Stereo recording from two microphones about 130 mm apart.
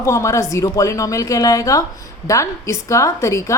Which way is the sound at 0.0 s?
20° left (ahead or behind).